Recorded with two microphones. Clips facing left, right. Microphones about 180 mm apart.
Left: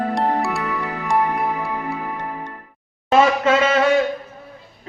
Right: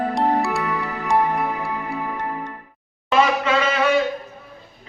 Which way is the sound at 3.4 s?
45° left (ahead or behind).